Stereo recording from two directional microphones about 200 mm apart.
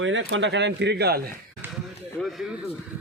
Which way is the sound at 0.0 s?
70° right (ahead or behind).